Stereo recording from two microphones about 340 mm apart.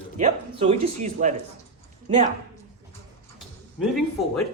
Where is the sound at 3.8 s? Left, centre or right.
Centre.